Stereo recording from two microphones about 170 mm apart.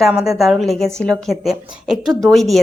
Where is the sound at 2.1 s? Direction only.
20° right (ahead or behind).